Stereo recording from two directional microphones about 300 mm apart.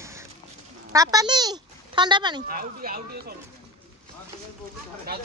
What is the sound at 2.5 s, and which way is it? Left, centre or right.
Speech, right.